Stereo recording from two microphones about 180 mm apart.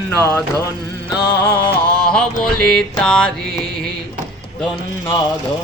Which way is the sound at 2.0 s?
5° left (ahead or behind).